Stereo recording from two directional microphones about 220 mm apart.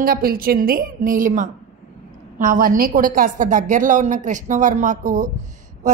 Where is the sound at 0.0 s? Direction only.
40° right (ahead or behind).